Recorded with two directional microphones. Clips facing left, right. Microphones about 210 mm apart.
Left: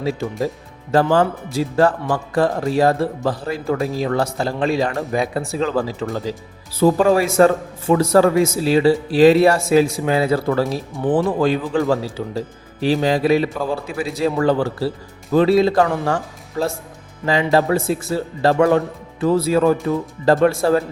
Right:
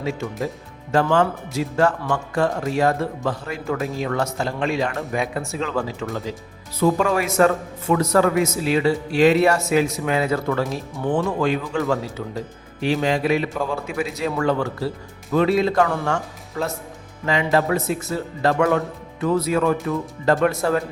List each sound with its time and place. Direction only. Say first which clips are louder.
0.0 s a man's voice: left 4 dB; 35° left (ahead or behind)